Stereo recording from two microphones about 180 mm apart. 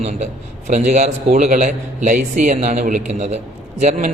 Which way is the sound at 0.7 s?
40° right (ahead or behind).